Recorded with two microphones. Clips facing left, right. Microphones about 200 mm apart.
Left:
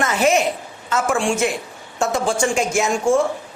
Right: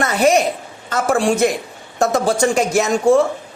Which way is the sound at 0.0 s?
35° right (ahead or behind).